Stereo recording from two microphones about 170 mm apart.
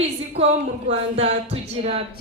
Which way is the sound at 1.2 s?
35° right (ahead or behind).